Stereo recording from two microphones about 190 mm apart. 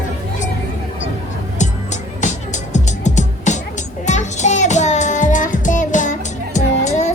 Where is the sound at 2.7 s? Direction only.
40° left (ahead or behind).